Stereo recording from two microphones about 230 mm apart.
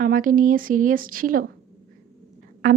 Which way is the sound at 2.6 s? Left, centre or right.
Right.